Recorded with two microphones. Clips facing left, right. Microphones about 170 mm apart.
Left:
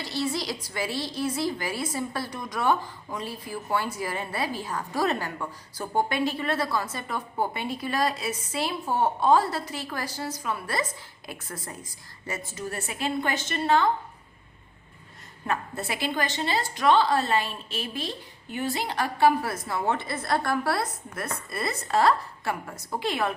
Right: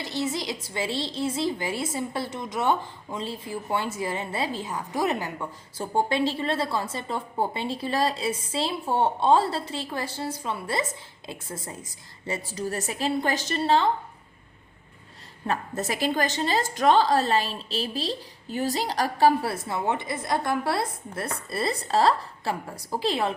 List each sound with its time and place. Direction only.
0.0 s a woman's voice: 20° right (ahead or behind)
15.4 s a woman's voice: 40° right (ahead or behind)